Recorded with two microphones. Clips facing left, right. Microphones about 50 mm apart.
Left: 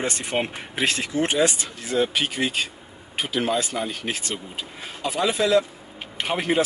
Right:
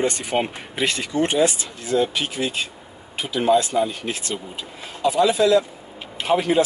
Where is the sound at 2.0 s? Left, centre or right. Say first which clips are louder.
Left 3 dB; left.